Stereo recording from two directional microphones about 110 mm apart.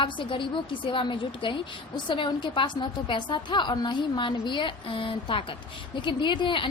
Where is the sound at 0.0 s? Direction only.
50° left (ahead or behind).